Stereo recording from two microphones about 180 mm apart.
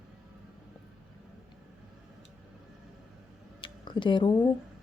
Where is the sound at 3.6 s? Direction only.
25° left (ahead or behind).